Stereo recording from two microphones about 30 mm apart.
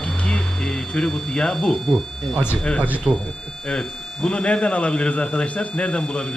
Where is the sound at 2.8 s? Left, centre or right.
Right.